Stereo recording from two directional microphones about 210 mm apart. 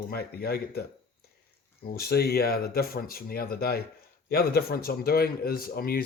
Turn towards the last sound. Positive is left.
turn(degrees=45)  # may be behind; listen again after turning